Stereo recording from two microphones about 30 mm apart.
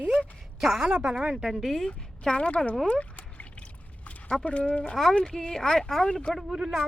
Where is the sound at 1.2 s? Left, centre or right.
Right.